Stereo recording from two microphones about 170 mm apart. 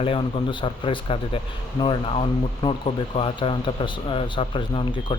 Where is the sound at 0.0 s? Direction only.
30° left (ahead or behind).